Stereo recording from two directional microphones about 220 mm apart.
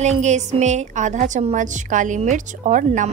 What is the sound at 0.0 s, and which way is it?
A woman's voice, 30° right (ahead or behind).